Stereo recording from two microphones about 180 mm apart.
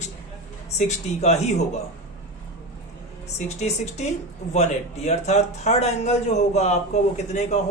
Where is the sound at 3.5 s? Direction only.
40° left (ahead or behind).